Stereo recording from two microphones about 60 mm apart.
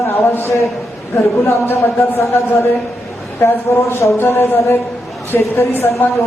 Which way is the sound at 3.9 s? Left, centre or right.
Left.